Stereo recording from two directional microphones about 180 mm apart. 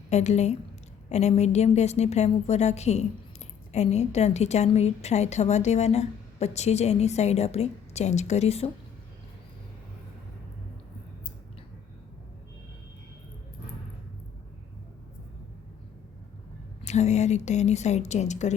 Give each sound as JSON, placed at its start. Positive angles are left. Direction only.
{"t": 0.1, "sound": "a woman's voice", "side_deg": 40}
{"t": 16.8, "sound": "a woman's voice", "side_deg": 40}